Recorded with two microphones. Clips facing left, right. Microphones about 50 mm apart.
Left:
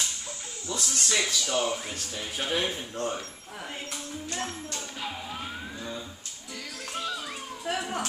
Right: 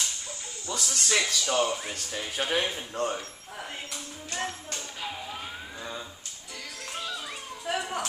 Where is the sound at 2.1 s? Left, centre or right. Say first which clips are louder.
Right 1 dB; centre.